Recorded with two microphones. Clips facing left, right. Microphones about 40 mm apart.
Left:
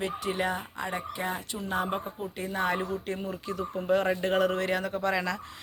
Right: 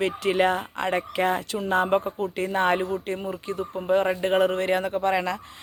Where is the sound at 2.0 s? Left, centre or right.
Right.